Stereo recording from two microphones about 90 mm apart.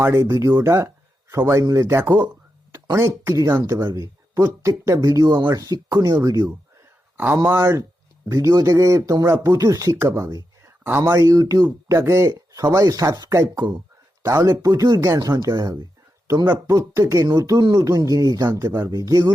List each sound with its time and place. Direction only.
0.0 s speech: 30° right (ahead or behind)
7.4 s speech: 25° right (ahead or behind)
10.8 s speech: 25° right (ahead or behind)
11.1 s speech: 40° right (ahead or behind)
14.2 s speech: 35° right (ahead or behind)
16.2 s a sound: 35° right (ahead or behind)
16.6 s speech: 40° right (ahead or behind)